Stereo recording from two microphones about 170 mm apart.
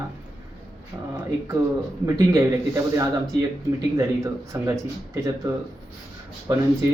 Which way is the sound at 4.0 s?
15° right (ahead or behind).